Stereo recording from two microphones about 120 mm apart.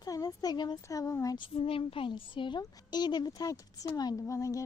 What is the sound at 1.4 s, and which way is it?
Speech, 50° left (ahead or behind).